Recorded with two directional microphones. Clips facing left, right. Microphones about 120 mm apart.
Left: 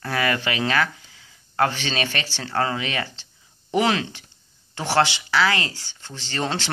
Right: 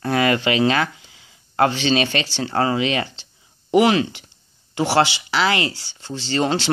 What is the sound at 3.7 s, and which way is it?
Speech, 5° right (ahead or behind).